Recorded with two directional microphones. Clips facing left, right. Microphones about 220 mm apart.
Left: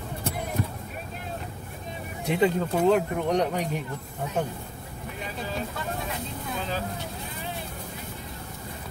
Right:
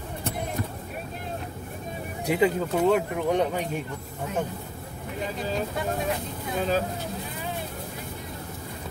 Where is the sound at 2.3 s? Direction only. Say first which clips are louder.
Even; 5° right (ahead or behind).